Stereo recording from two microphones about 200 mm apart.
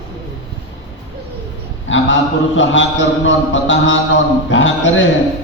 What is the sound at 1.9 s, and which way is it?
A man's voice, 70° left (ahead or behind).